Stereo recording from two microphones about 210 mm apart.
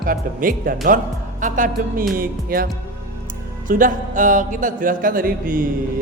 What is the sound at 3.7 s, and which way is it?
A man's voice, 40° right (ahead or behind).